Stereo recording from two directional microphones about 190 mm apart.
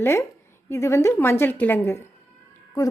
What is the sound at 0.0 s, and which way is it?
Speech, 15° left (ahead or behind).